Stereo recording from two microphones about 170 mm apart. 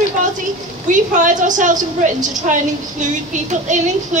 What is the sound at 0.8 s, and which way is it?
A woman's voice, 50° right (ahead or behind).